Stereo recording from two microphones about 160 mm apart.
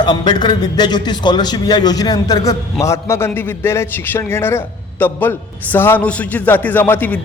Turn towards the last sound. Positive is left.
turn(degrees=10)  # may be behind; listen again after turning